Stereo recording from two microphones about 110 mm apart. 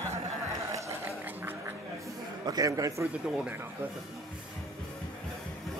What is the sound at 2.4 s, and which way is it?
Speech, 35° right (ahead or behind).